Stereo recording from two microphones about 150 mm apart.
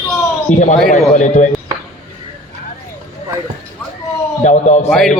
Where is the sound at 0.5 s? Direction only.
55° left (ahead or behind).